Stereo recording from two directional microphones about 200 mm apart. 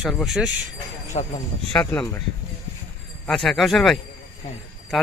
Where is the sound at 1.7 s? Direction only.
10° left (ahead or behind).